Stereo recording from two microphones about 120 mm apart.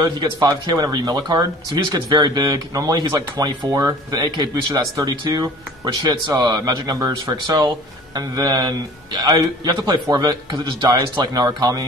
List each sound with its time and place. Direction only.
0.0 s speech: 35° right (ahead or behind)